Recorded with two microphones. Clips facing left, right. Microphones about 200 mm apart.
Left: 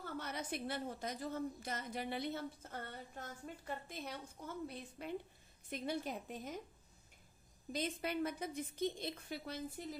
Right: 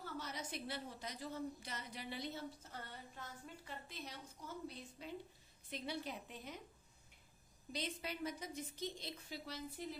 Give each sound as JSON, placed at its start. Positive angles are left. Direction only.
{"t": 0.0, "sound": "a woman's voice", "side_deg": 55}
{"t": 7.7, "sound": "a woman's voice", "side_deg": 50}